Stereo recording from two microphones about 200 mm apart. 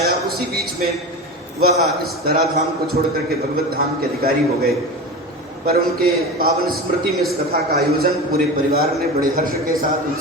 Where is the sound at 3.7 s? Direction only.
50° right (ahead or behind).